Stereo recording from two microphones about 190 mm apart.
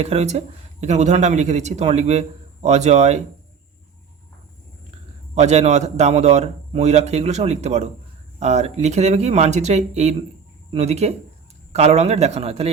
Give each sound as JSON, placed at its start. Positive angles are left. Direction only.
{"t": 0.0, "sound": "speech", "side_deg": -35}
{"t": 5.3, "sound": "speech", "side_deg": -35}